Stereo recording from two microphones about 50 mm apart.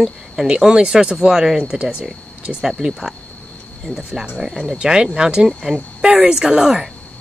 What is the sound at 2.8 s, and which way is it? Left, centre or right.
Speech, centre.